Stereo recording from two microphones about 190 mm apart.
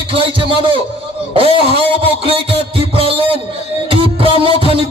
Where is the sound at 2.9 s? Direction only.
30° right (ahead or behind).